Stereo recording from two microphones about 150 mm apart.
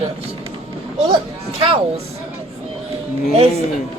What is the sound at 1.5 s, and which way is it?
Speech, 40° right (ahead or behind).